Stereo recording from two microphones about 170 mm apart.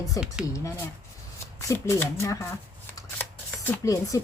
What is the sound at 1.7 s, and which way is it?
Speech, 15° left (ahead or behind).